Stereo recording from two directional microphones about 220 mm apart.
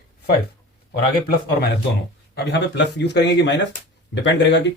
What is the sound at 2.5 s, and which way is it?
Speech, 50° left (ahead or behind).